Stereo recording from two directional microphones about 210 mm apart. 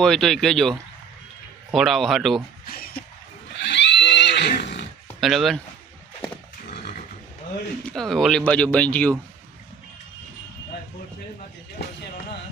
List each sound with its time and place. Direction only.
0.0 s speech: centre (ahead or behind)
2.6 s speech: 45° left (ahead or behind)
3.6 s neigh: 55° left (ahead or behind)
5.2 s speech: centre (ahead or behind)
7.9 s speech: centre (ahead or behind)